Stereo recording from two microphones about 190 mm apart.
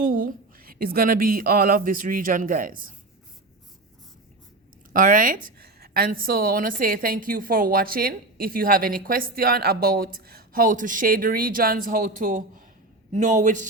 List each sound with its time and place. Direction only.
0.0 s a woman's voice: 50° right (ahead or behind)
4.9 s a woman's voice: 45° right (ahead or behind)